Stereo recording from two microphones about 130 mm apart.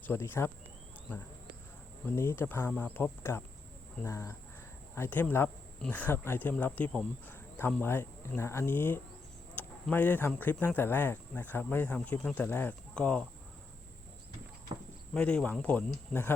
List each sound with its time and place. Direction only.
0.0 s speech: 15° left (ahead or behind)
2.0 s speech: 20° left (ahead or behind)
15.1 s speech: 10° left (ahead or behind)